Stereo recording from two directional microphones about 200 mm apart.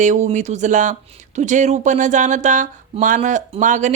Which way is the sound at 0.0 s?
35° right (ahead or behind).